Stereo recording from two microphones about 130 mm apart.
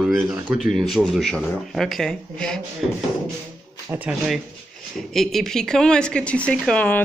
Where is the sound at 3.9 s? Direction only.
10° right (ahead or behind).